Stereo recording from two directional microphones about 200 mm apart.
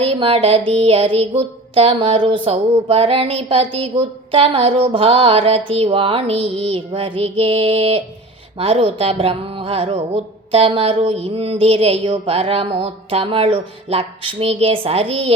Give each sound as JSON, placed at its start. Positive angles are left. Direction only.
{"t": 0.0, "sound": "speech", "side_deg": -30}